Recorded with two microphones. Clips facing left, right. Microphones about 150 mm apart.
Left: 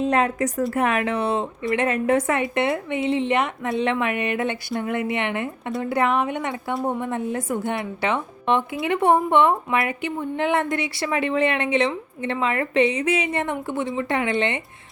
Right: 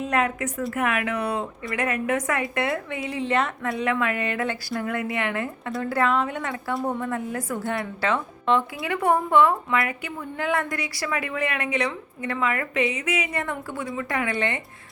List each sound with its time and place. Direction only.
0.0 s a woman's voice: 30° left (ahead or behind)